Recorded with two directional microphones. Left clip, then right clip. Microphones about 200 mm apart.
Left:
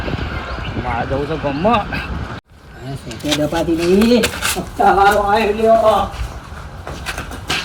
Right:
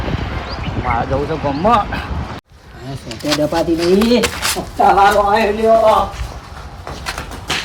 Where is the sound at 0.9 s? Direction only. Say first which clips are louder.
Right 3 dB; centre (ahead or behind).